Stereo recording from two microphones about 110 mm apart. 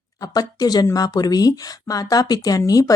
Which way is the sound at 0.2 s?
35° left (ahead or behind).